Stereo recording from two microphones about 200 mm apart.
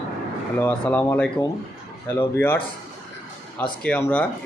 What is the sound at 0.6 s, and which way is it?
Speech, 10° left (ahead or behind).